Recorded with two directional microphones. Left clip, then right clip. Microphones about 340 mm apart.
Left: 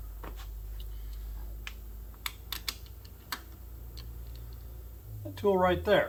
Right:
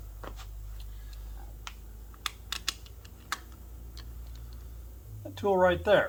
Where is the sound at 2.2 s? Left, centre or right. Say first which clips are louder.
Right 3 dB; centre.